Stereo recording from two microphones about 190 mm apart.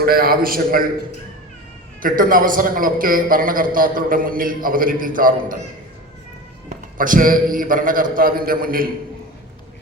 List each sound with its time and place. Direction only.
0.0 s a man's voice: 50° right (ahead or behind)
2.0 s a man's voice: 45° right (ahead or behind)
6.7 s a man's voice: 45° right (ahead or behind)